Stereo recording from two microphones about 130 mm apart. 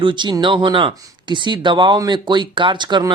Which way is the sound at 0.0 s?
40° right (ahead or behind).